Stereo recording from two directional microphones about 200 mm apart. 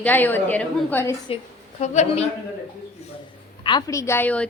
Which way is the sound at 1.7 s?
35° left (ahead or behind).